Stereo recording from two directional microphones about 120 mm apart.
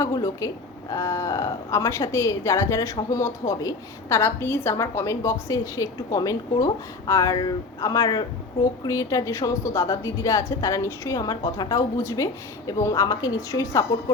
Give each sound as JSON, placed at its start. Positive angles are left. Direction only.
{"t": 0.0, "sound": "a woman's voice", "side_deg": 30}